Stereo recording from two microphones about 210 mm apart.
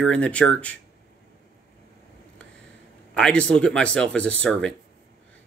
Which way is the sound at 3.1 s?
5° left (ahead or behind).